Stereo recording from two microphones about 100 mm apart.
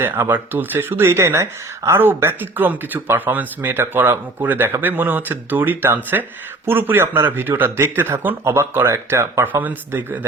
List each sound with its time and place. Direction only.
0.0 s speech: 20° right (ahead or behind)